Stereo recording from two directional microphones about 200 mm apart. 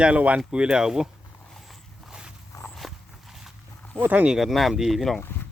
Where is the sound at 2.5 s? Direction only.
5° left (ahead or behind).